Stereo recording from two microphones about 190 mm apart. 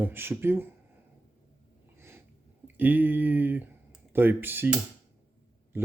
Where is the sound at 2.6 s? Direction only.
10° right (ahead or behind).